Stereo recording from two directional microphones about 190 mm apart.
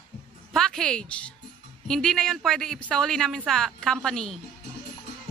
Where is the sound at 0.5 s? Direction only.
Centre (ahead or behind).